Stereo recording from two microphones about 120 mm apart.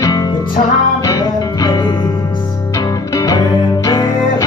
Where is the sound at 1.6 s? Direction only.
35° left (ahead or behind).